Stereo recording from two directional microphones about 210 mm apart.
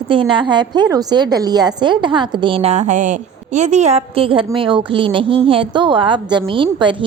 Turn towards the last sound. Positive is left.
turn(degrees=-25)  # may be behind; listen again after turning